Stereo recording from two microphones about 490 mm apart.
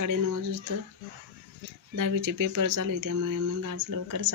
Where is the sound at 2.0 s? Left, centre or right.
Right.